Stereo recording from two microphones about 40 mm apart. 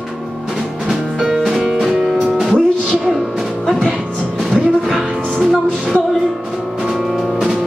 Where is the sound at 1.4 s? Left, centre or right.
Centre.